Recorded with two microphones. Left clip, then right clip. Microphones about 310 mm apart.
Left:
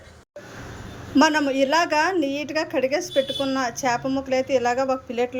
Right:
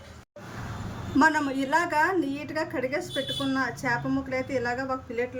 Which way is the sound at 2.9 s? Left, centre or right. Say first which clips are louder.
Left 6 dB; centre.